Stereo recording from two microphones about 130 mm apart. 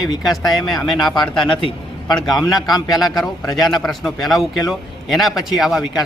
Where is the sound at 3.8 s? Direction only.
Centre (ahead or behind).